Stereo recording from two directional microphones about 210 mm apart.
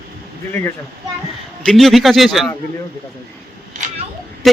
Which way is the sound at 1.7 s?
Centre (ahead or behind).